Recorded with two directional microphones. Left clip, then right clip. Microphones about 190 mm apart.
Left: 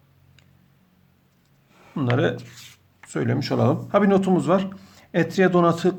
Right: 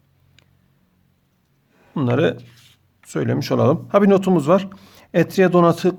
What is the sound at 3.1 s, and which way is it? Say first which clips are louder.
Speech: right 4 dB; 35° right (ahead or behind).